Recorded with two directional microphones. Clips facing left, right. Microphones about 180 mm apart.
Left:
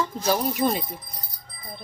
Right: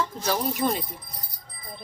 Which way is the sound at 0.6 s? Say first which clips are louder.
Left 2 dB; 25° left (ahead or behind).